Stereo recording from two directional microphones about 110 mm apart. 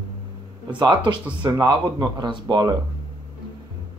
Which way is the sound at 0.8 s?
45° right (ahead or behind).